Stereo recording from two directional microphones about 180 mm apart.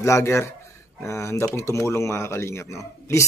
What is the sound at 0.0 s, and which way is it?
Speech, 15° left (ahead or behind).